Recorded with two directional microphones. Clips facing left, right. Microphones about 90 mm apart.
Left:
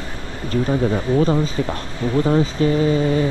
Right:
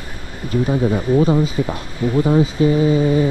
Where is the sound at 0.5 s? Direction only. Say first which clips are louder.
Right 1 dB; 15° right (ahead or behind).